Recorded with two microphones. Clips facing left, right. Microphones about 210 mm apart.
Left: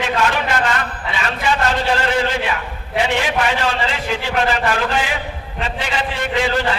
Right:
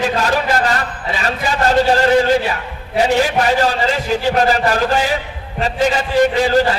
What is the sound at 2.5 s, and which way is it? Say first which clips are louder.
A man's voice: even; 40° right (ahead or behind).